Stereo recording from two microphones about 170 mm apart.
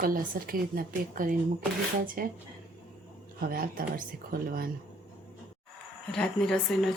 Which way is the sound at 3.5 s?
60° right (ahead or behind).